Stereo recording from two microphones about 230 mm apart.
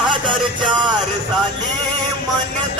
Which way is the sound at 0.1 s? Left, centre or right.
Right.